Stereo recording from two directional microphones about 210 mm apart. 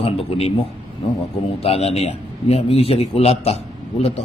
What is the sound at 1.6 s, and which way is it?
A man's voice, 30° left (ahead or behind).